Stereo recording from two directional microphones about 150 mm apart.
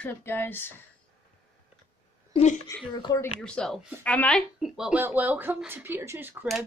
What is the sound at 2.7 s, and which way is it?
Speech, 20° left (ahead or behind).